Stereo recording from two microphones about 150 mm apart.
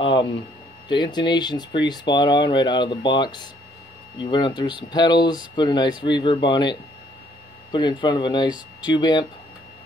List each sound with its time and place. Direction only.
0.0 s speech: 30° left (ahead or behind)